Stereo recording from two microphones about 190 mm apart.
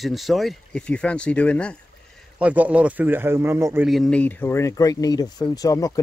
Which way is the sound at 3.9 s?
5° left (ahead or behind).